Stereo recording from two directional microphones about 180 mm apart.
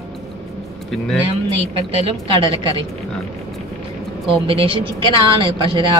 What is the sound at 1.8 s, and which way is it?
Speech, 30° right (ahead or behind).